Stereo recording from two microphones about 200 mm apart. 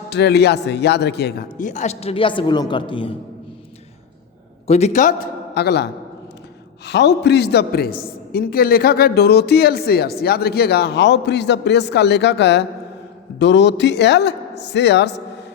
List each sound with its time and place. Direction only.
0.1 s a woman's voice: 55° left (ahead or behind)
1.5 s a woman's voice: 40° left (ahead or behind)
4.6 s a man's voice: 35° left (ahead or behind)
5.5 s a woman's voice: 55° left (ahead or behind)